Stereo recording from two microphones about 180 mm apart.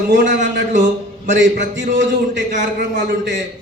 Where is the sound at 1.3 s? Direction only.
90° right.